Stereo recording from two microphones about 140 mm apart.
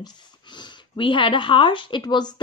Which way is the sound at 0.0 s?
35° left (ahead or behind).